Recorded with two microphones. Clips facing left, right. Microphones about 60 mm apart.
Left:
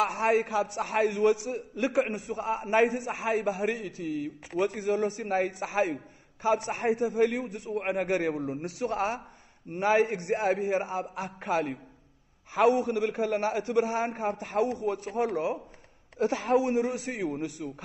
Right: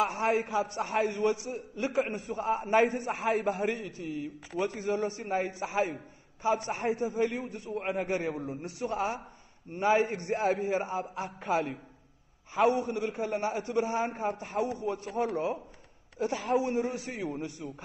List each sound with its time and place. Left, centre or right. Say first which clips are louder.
0.0 s a man's voice: left 2 dB; left; by 4.1 s centre
4.7 s a man's voice: left 3 dB; left
15.3 s a man's voice: left 2 dB; centre
16.2 s a woman's voice: left 4 dB; left
16.5 s a man's voice: left 3 dB; left